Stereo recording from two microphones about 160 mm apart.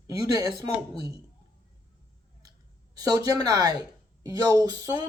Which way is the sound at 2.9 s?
25° right (ahead or behind).